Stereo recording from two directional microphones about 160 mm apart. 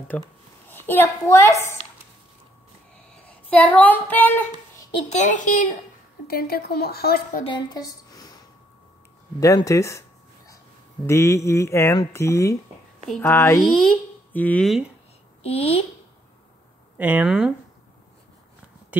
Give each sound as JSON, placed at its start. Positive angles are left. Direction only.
{"t": 0.1, "sound": "a sound", "side_deg": 10}
{"t": 0.7, "sound": "a child's voice", "side_deg": 15}
{"t": 3.4, "sound": "a sound", "side_deg": 10}
{"t": 5.1, "sound": "a child's voice", "side_deg": 50}
{"t": 6.2, "sound": "a woman's voice", "side_deg": 70}
{"t": 7.4, "sound": "a woman's voice", "side_deg": 25}
{"t": 9.4, "sound": "a sound", "side_deg": 20}
{"t": 13.6, "sound": "speech", "side_deg": 0}
{"t": 15.4, "sound": "a woman's voice", "side_deg": 40}
{"t": 17.0, "sound": "speech", "side_deg": -10}